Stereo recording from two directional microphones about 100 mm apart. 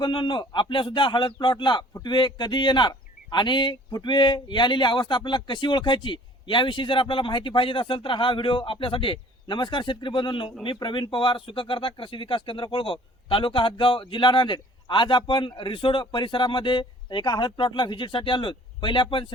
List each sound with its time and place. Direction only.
0.0 s speech: 50° left (ahead or behind)